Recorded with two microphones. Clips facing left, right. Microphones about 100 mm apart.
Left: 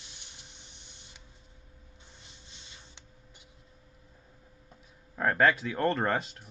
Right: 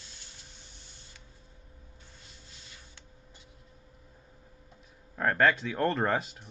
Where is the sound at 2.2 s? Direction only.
20° left (ahead or behind).